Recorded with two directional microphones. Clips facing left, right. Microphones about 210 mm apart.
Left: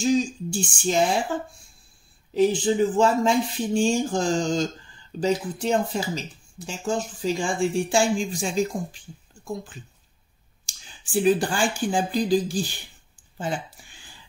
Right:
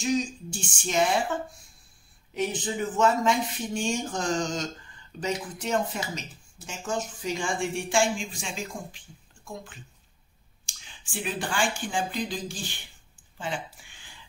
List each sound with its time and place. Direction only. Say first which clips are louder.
0.0 s a sound: left 5 dB; 30° left (ahead or behind)
0.7 s speech: left 2 dB; 30° left (ahead or behind)
10.7 s speech: left 12 dB; 35° left (ahead or behind)